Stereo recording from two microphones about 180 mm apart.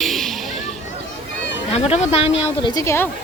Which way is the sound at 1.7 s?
35° left (ahead or behind).